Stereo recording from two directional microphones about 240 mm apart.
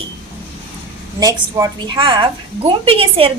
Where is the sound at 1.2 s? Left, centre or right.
Centre.